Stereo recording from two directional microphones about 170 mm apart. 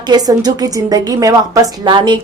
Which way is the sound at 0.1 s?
25° right (ahead or behind).